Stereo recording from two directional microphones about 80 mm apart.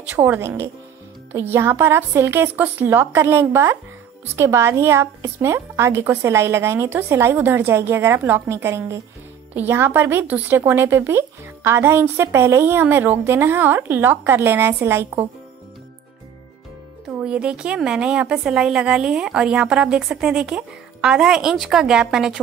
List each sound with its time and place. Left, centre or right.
0.1 s a woman's voice: right
9.5 s a woman's voice: right
10.2 s a woman's voice: centre
17.2 s a woman's voice: centre